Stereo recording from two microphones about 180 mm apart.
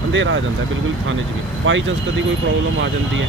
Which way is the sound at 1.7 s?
90° right.